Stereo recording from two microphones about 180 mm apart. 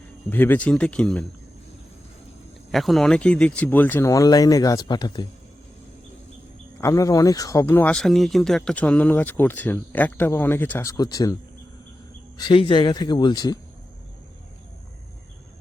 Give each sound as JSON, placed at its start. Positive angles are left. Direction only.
{"t": 0.3, "sound": "speech", "side_deg": 10}
{"t": 2.7, "sound": "speech", "side_deg": 0}
{"t": 6.7, "sound": "speech", "side_deg": 15}
{"t": 12.4, "sound": "speech", "side_deg": 30}